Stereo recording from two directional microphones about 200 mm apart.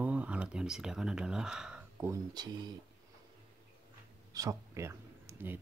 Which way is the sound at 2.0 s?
20° right (ahead or behind).